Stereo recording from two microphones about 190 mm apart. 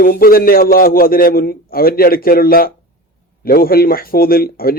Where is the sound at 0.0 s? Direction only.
50° left (ahead or behind).